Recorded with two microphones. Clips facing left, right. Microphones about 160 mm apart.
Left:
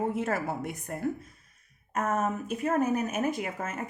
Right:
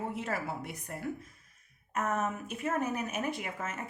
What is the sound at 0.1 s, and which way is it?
Speech, 50° left (ahead or behind).